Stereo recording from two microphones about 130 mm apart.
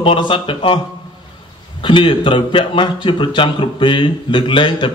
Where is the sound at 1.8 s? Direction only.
40° left (ahead or behind).